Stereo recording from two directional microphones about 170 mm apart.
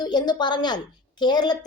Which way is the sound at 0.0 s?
25° left (ahead or behind).